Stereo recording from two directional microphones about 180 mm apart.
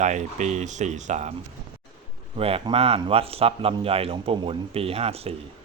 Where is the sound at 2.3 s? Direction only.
30° right (ahead or behind).